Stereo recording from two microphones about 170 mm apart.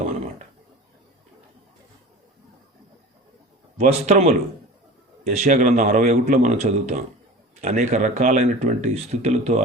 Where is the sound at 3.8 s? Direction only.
40° right (ahead or behind).